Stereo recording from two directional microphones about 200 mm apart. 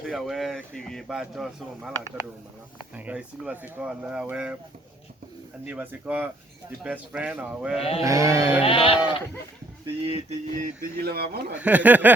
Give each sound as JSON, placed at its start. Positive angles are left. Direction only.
{"t": 0.0, "sound": "speech", "side_deg": 0}
{"t": 5.6, "sound": "speech", "side_deg": -10}
{"t": 7.8, "sound": "speech", "side_deg": 30}
{"t": 8.0, "sound": "speech", "side_deg": -15}
{"t": 8.6, "sound": "speech", "side_deg": 25}
{"t": 9.8, "sound": "a sound", "side_deg": -30}
{"t": 11.0, "sound": "speech", "side_deg": -50}
{"t": 11.5, "sound": "speech", "side_deg": -5}